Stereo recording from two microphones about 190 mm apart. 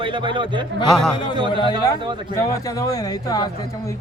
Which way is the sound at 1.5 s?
25° left (ahead or behind).